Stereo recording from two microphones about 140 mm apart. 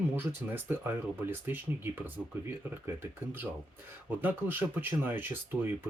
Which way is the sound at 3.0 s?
15° right (ahead or behind).